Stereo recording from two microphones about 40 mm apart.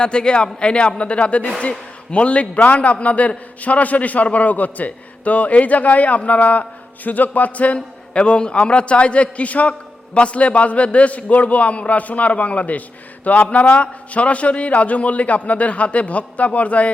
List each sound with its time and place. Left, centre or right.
0.0 s a man's voice: left
13.7 s a man's voice: left